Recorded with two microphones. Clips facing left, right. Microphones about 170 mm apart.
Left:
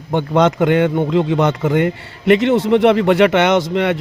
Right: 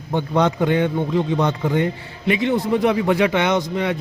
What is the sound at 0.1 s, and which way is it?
A man's voice, 80° left.